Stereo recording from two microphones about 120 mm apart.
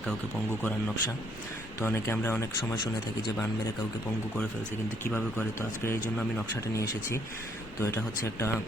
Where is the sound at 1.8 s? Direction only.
20° left (ahead or behind).